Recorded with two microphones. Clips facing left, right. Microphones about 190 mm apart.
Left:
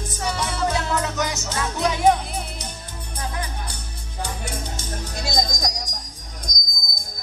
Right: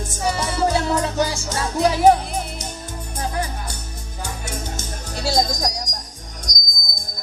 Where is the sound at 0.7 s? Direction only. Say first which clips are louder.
Right 4 dB; 30° right (ahead or behind).